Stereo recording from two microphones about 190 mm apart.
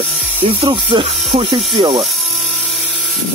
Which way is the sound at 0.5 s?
30° right (ahead or behind).